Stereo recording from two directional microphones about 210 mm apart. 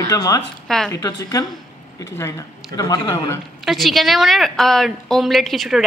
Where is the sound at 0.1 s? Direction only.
15° left (ahead or behind).